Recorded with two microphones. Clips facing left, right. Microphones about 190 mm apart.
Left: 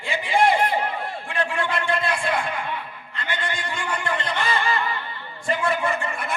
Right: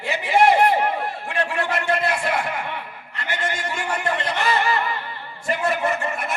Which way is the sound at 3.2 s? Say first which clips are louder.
Right 2 dB; 45° right (ahead or behind).